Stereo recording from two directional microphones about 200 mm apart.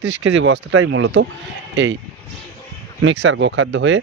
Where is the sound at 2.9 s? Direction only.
70° right (ahead or behind).